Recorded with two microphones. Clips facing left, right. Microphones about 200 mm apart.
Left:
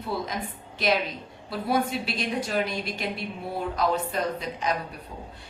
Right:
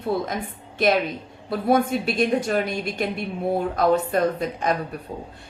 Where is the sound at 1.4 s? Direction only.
50° right (ahead or behind).